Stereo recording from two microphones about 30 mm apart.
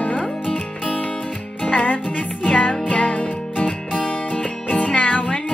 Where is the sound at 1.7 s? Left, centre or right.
Left.